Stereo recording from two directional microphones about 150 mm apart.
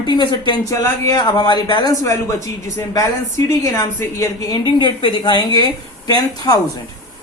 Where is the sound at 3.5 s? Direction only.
20° left (ahead or behind).